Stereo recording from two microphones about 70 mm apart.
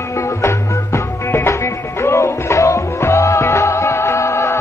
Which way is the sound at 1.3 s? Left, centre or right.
Left.